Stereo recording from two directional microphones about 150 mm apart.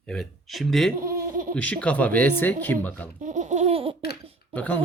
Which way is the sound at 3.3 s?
55° right (ahead or behind).